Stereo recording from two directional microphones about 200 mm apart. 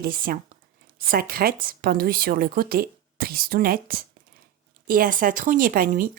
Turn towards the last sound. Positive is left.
turn(degrees=-45)  # may be behind; listen again after turning